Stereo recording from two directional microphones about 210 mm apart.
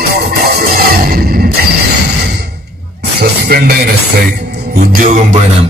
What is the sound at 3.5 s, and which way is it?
Speech, 45° right (ahead or behind).